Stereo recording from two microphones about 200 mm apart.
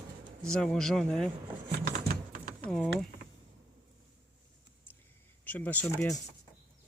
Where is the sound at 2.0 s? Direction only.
45° right (ahead or behind).